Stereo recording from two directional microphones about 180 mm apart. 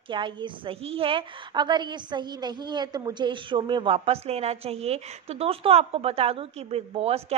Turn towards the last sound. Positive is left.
turn(degrees=-35)  # may be behind; listen again after turning